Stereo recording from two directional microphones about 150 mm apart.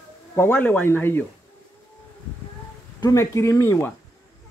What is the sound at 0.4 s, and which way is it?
Speech, 10° left (ahead or behind).